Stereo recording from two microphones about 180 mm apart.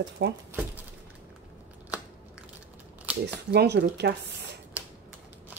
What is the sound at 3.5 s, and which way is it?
Speech, 65° right (ahead or behind).